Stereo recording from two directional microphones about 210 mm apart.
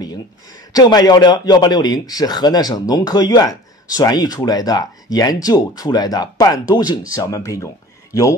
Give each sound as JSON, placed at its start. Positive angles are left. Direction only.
{"t": 0.7, "sound": "speech", "side_deg": 20}